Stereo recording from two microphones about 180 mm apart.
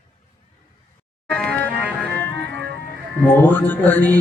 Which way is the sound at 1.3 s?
10° left (ahead or behind).